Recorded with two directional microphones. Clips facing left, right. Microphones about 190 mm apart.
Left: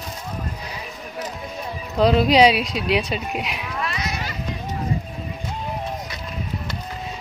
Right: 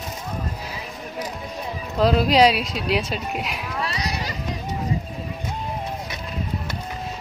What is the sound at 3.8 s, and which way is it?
Run, 35° right (ahead or behind).